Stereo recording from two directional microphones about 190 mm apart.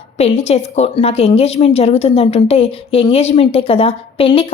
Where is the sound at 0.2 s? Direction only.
35° left (ahead or behind).